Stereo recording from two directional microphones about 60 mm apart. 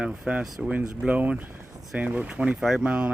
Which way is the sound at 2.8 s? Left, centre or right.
Centre.